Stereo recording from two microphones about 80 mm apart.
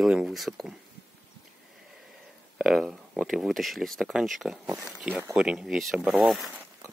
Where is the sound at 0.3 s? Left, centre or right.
Centre.